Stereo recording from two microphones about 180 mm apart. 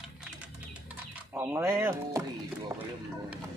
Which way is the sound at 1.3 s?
10° right (ahead or behind).